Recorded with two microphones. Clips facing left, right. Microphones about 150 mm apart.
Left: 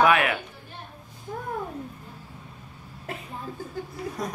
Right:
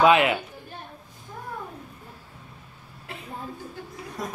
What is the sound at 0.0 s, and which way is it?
Speech, 20° right (ahead or behind).